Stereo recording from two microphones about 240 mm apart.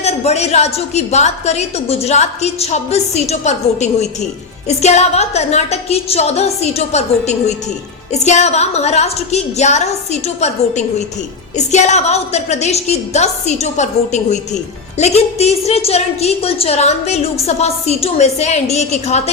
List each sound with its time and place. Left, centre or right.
0.0 s a woman's voice: left